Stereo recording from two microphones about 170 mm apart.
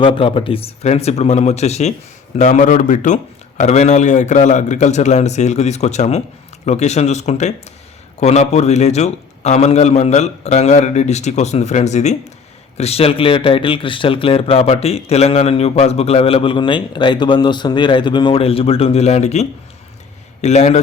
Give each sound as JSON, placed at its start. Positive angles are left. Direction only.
{"t": 0.0, "sound": "a man's voice", "side_deg": 30}